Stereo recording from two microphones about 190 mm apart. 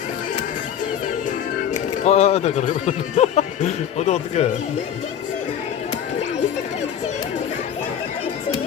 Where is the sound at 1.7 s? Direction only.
35° left (ahead or behind).